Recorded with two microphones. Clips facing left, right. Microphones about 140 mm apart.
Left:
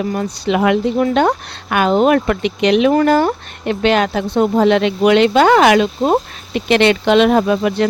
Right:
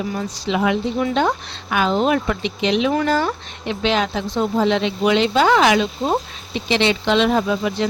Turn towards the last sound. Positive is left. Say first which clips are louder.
# left 5 dB
turn(degrees=60)  # may be behind; listen again after turning